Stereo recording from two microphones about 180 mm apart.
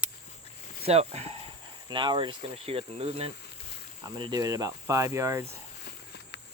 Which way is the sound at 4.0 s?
20° right (ahead or behind).